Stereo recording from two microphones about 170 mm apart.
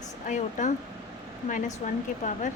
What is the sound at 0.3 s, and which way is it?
Speech, 45° left (ahead or behind).